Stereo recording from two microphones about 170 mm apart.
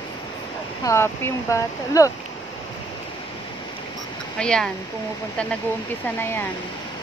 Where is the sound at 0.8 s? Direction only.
15° left (ahead or behind).